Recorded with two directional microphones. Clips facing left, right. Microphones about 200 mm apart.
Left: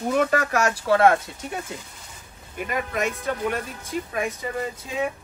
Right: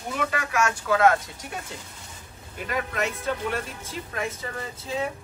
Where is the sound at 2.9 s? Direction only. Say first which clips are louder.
Left 2 dB; 15° left (ahead or behind).